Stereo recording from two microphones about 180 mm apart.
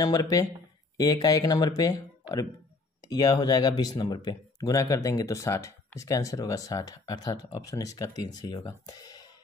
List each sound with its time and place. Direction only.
0.0 s speech: 20° left (ahead or behind)